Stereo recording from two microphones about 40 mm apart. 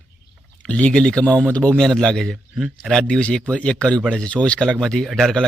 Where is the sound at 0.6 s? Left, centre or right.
Left.